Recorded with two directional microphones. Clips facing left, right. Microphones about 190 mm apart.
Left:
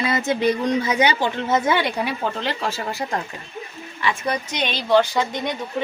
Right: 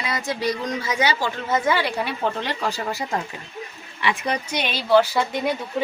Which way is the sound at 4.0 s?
15° right (ahead or behind).